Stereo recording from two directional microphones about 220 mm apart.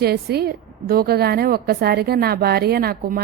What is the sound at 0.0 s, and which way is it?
A woman's voice, 45° right (ahead or behind).